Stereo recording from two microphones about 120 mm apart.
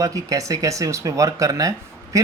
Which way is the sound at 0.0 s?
30° right (ahead or behind).